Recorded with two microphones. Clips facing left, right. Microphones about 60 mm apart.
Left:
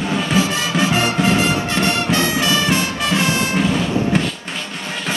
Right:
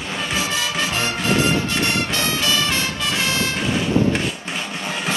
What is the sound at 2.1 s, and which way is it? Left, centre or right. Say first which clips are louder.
Music: left 4 dB; left.